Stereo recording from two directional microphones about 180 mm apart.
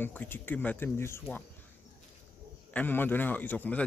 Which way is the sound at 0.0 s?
10° left (ahead or behind).